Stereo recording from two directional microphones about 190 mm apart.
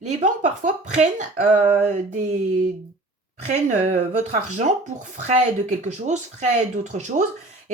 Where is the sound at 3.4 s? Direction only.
40° right (ahead or behind).